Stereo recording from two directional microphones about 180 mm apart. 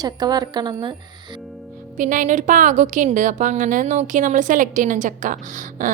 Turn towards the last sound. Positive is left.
turn(degrees=-45)  # may be behind; listen again after turning